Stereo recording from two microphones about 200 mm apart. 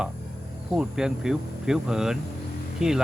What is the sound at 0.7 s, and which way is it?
Speech, 5° right (ahead or behind).